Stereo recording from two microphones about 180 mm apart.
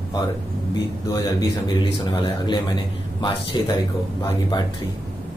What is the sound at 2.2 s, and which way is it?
Speech, 25° left (ahead or behind).